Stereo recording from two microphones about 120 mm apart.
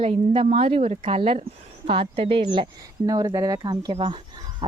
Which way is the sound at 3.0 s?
30° right (ahead or behind).